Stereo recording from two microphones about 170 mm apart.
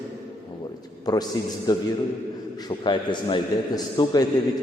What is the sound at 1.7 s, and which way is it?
A man's voice, 20° left (ahead or behind).